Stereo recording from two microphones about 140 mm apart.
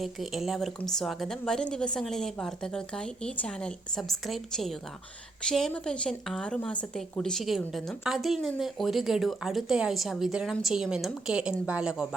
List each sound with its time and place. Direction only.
0.0 s a woman's voice: centre (ahead or behind)